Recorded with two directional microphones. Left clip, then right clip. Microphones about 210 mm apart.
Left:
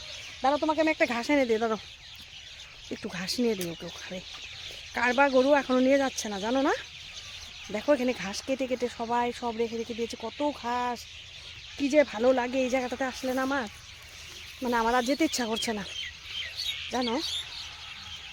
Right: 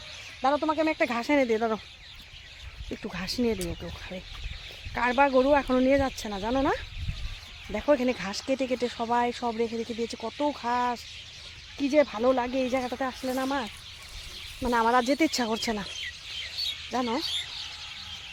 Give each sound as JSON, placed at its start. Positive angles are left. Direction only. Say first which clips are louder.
{"t": 0.4, "sound": "speech", "louder": "even", "side_deg": -15}
{"t": 2.9, "sound": "speech", "louder": "even", "side_deg": -10}
{"t": 4.9, "sound": "speech", "louder": "even", "side_deg": -5}
{"t": 7.7, "sound": "speech", "louder": "right 1 dB", "side_deg": -15}
{"t": 11.8, "sound": "speech", "louder": "even", "side_deg": -10}
{"t": 14.6, "sound": "speech", "louder": "right 2 dB", "side_deg": -20}
{"t": 16.9, "sound": "speech", "louder": "even", "side_deg": -10}